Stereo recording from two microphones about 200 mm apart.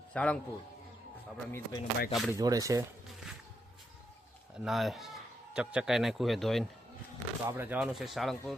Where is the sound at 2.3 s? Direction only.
15° right (ahead or behind).